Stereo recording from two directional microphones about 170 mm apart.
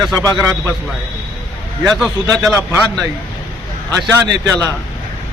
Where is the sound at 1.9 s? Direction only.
Centre (ahead or behind).